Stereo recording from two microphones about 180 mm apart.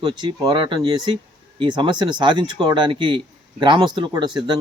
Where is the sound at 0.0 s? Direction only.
25° right (ahead or behind).